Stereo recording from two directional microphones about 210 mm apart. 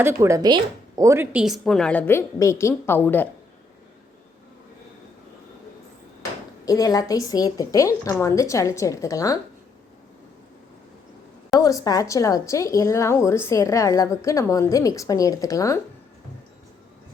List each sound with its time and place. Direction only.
0.0 s a woman's voice: 10° right (ahead or behind); by 3.2 s 10° left (ahead or behind)
6.7 s a woman's voice: 15° left (ahead or behind)
11.5 s a woman's voice: 15° left (ahead or behind)